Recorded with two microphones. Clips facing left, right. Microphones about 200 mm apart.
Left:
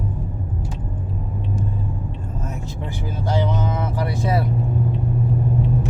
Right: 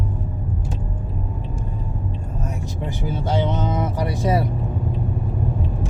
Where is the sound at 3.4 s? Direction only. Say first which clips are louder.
Right 1 dB; 20° right (ahead or behind).